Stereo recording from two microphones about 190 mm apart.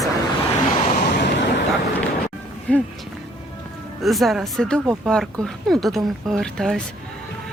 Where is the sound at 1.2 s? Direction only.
65° left (ahead or behind).